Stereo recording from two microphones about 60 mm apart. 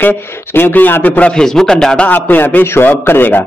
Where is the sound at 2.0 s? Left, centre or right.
Left.